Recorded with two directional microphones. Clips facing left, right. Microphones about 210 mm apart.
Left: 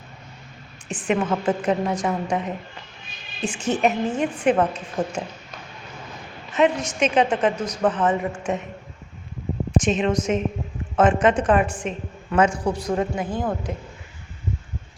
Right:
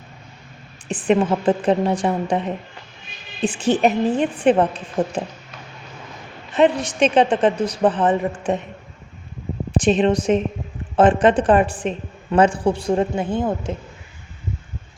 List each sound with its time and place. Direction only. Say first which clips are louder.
0.9 s a woman's voice: right 5 dB; 35° right (ahead or behind)
6.5 s a woman's voice: right 3 dB; 35° right (ahead or behind)
9.7 s a woman's voice: right 4 dB; 35° right (ahead or behind)